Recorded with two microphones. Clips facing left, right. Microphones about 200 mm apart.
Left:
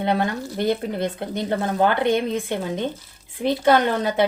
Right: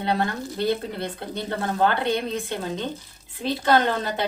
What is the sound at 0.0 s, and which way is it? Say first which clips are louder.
A woman's voice: left 3 dB; 20° left (ahead or behind).